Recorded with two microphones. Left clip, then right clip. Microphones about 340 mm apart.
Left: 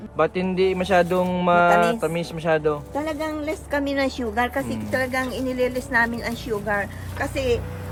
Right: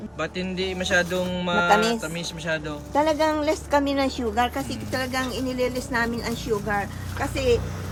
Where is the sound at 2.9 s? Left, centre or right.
Centre.